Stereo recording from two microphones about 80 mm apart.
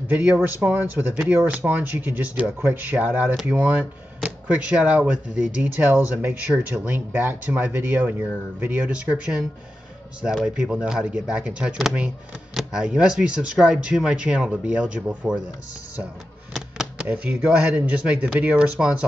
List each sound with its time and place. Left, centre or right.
0.1 s speech: centre
12.8 s speech: centre
17.0 s speech: centre